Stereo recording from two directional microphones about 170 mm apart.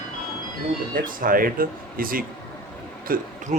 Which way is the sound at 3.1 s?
45° right (ahead or behind).